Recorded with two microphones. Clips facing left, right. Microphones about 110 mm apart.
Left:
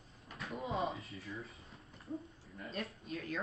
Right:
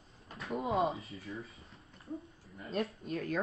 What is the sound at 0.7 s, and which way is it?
Speech, centre (ahead or behind).